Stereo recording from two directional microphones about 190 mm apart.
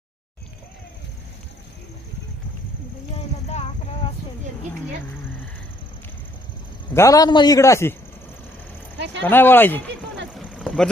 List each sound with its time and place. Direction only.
6.9 s a man's voice: 15° left (ahead or behind)
9.2 s a man's voice: 10° left (ahead or behind)
10.3 s boat: centre (ahead or behind)